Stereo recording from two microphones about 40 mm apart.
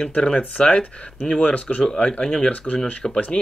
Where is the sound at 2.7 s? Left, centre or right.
Centre.